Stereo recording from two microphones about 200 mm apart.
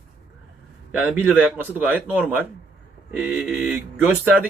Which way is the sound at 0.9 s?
10° right (ahead or behind).